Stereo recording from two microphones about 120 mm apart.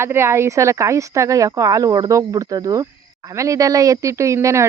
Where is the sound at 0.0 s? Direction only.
20° right (ahead or behind).